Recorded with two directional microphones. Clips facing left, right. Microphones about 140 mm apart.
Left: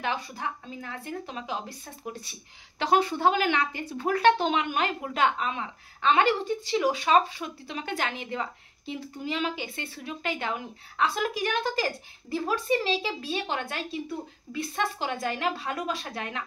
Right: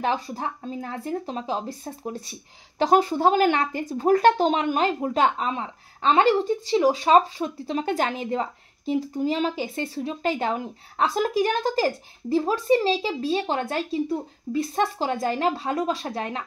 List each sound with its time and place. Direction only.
0.0 s speech: 35° right (ahead or behind)